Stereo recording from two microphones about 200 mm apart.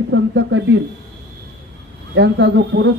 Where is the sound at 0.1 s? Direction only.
65° right (ahead or behind).